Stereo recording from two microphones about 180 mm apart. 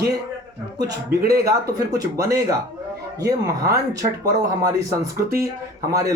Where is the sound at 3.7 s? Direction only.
20° right (ahead or behind).